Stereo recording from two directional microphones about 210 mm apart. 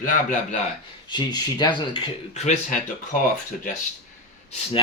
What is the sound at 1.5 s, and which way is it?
Speech, 20° left (ahead or behind).